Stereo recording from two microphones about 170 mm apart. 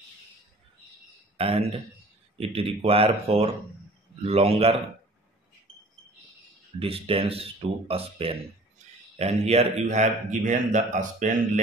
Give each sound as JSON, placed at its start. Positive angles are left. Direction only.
{"t": 1.3, "sound": "a man's voice", "side_deg": -35}
{"t": 6.8, "sound": "a man's voice", "side_deg": -35}